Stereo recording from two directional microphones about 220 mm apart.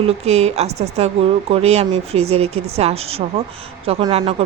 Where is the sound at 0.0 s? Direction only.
30° right (ahead or behind).